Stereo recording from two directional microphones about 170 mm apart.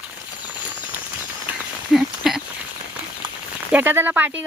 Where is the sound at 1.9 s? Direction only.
Centre (ahead or behind).